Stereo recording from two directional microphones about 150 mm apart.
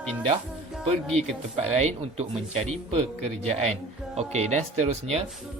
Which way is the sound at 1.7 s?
45° right (ahead or behind).